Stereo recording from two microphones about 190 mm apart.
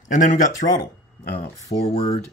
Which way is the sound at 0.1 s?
45° left (ahead or behind).